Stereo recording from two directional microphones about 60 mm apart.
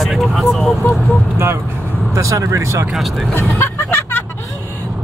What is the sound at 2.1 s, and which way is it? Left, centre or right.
Speech, right.